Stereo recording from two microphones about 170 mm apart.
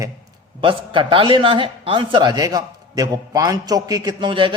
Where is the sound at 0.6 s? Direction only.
30° right (ahead or behind).